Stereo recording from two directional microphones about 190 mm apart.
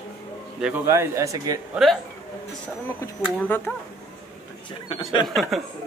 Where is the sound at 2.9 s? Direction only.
10° left (ahead or behind).